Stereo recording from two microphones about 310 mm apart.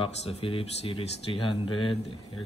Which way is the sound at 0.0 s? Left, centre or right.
Centre.